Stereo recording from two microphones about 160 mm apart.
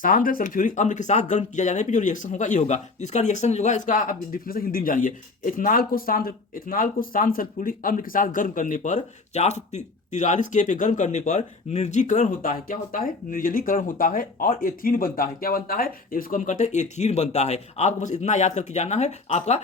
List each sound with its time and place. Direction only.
0.0 s speech: 60° left (ahead or behind); by 19.6 s 45° left (ahead or behind)